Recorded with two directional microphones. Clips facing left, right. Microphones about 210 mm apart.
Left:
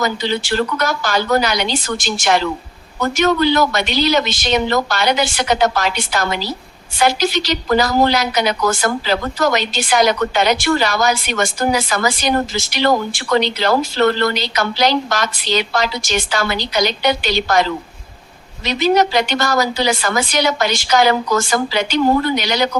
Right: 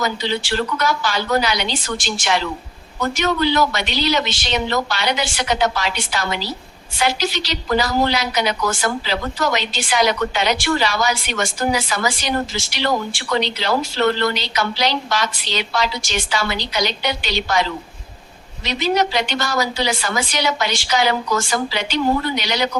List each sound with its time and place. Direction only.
0.0 s a woman's voice: 45° left (ahead or behind)